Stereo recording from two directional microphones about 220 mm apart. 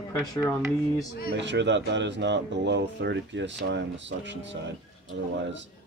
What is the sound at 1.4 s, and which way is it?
Speech, 55° right (ahead or behind).